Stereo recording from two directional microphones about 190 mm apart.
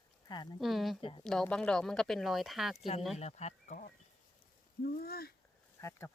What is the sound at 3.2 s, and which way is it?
Speech, 35° left (ahead or behind).